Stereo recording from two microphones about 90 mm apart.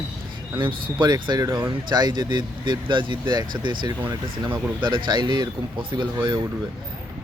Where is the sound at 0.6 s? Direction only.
55° right (ahead or behind).